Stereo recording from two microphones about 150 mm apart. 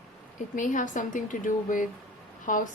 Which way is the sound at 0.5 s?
60° left (ahead or behind).